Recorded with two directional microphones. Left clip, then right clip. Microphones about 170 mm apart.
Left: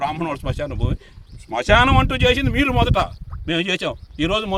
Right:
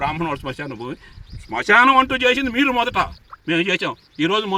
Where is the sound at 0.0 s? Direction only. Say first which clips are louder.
Right 1 dB; 30° left (ahead or behind).